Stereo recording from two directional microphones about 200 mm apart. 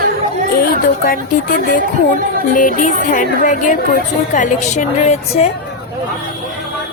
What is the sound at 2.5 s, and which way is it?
Speech, 40° left (ahead or behind).